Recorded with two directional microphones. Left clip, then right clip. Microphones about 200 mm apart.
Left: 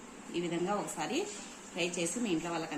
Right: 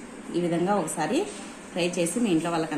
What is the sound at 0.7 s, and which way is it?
A woman's voice, 30° right (ahead or behind).